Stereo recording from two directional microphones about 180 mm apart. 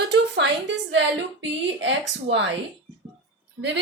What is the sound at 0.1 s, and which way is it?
A woman's voice, 80° right.